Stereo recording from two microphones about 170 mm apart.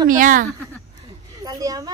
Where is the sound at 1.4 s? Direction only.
20° right (ahead or behind).